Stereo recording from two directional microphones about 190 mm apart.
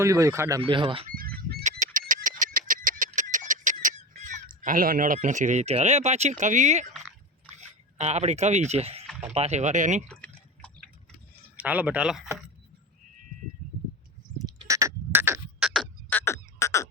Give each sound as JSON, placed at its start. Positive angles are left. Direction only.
{"t": 0.0, "sound": "speech", "side_deg": -15}
{"t": 0.7, "sound": "speech", "side_deg": -25}
{"t": 1.0, "sound": "goose", "side_deg": -50}
{"t": 1.6, "sound": "bird", "side_deg": -40}
{"t": 7.5, "sound": "speech", "side_deg": -35}
{"t": 10.1, "sound": "drip", "side_deg": 5}
{"t": 11.6, "sound": "speech", "side_deg": -10}
{"t": 14.4, "sound": "a sound", "side_deg": -15}
{"t": 15.7, "sound": "frog", "side_deg": 5}